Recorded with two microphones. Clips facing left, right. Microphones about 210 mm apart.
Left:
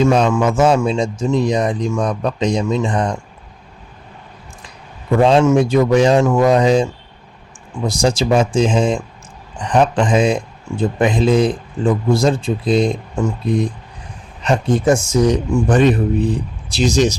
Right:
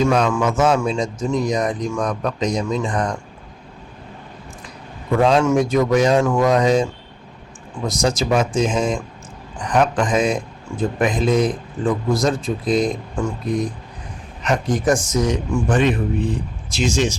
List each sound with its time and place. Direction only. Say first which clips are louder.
0.0 s a man's voice: left 3 dB; 30° left (ahead or behind)
5.2 s a man's voice: left 4 dB; 25° left (ahead or behind)
7.9 s a man's voice: left 3 dB; 30° left (ahead or behind)
14.4 s a man's voice: left 4 dB; 30° left (ahead or behind)